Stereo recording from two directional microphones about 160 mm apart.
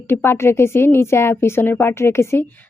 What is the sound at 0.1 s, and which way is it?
A woman's voice, 15° left (ahead or behind).